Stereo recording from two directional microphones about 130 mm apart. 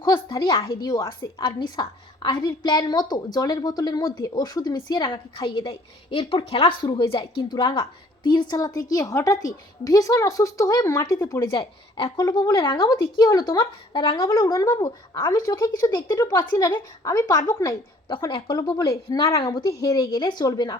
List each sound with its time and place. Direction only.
0.0 s a woman's voice: 35° left (ahead or behind)
0.8 s a woman's voice: 30° left (ahead or behind)
11.6 s a woman's voice: 40° left (ahead or behind)
18.3 s a woman's voice: 40° left (ahead or behind)